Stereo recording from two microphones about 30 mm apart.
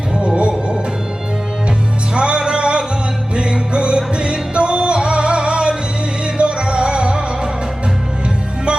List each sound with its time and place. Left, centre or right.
0.3 s music: right
2.1 s music: right